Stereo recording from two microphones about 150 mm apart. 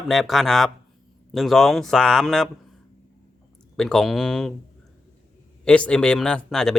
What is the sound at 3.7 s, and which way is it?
Speech, 5° left (ahead or behind).